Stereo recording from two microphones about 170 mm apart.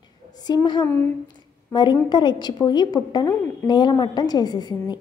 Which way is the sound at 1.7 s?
25° left (ahead or behind).